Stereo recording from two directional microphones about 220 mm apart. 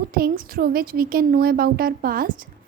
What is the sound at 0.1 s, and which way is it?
A woman's voice, 40° right (ahead or behind).